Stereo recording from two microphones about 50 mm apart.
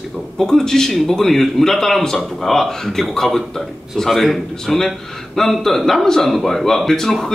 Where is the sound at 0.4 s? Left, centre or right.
Centre.